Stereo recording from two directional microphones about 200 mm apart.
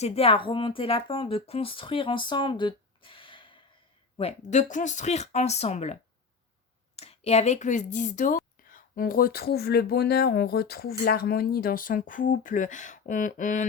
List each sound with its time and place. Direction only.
0.0 s speech: 30° left (ahead or behind)